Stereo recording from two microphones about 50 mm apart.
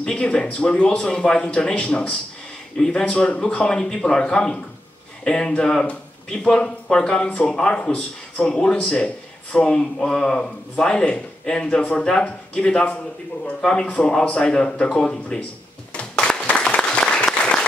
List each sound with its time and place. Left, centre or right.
0.0 s speech: centre
7.8 s speech: left
8.5 s speech: centre
15.9 s applause: left